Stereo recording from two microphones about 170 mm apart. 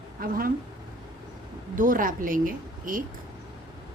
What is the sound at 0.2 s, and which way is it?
Speech, 60° right (ahead or behind).